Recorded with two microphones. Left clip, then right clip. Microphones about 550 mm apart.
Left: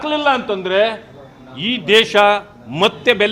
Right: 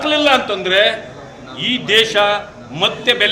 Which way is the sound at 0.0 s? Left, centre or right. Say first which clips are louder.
Right 3 dB; left.